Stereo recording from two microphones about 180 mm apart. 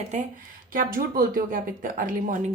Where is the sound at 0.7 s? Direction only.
50° right (ahead or behind).